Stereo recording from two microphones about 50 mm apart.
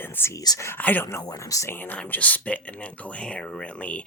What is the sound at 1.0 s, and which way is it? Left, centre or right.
Speech, left.